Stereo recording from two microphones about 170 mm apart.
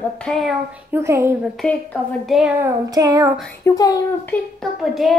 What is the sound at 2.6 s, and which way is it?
Child singing, 20° right (ahead or behind).